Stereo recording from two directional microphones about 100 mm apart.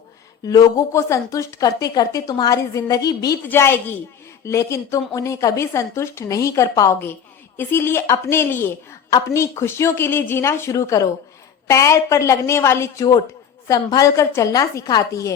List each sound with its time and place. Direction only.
0.4 s a woman's voice: 40° left (ahead or behind)
3.4 s a woman's voice: 20° left (ahead or behind); by 15.3 s 40° left (ahead or behind)